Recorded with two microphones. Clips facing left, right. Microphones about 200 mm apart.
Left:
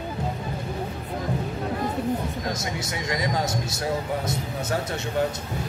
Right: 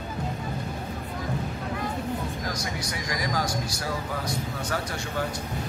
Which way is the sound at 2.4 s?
25° left (ahead or behind).